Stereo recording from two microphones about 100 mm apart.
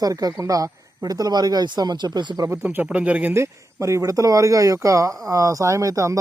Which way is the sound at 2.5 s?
20° right (ahead or behind).